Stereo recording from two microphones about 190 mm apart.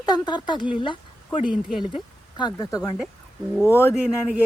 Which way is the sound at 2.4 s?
20° left (ahead or behind).